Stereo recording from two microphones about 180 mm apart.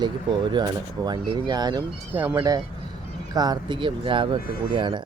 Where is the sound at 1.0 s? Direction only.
25° right (ahead or behind).